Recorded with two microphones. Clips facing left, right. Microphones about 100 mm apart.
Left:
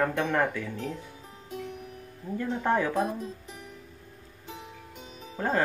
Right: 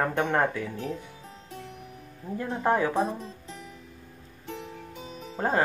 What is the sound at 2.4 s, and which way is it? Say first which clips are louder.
Speech: right 1 dB; 15° right (ahead or behind).